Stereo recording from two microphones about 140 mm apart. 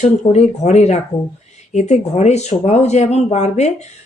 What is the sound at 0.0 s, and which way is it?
Speech, 50° left (ahead or behind).